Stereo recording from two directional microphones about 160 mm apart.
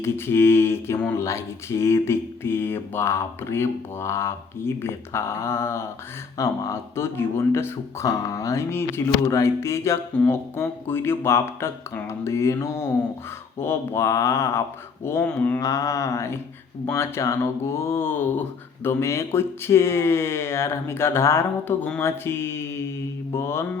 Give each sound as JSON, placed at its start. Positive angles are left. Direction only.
{"t": 0.0, "sound": "speech", "side_deg": 15}